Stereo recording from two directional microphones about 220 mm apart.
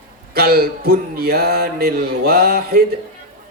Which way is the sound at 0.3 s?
45° right (ahead or behind).